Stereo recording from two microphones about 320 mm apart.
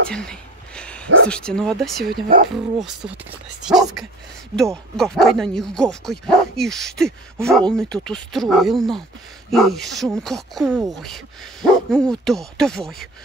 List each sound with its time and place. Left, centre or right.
0.1 s a sound: centre
1.3 s speech: centre
2.0 s speech: right
2.5 s speech: centre